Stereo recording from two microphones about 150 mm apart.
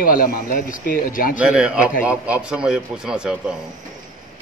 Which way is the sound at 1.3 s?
5° right (ahead or behind).